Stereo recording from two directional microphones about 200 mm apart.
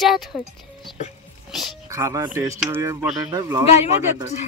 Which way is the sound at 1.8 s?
15° right (ahead or behind).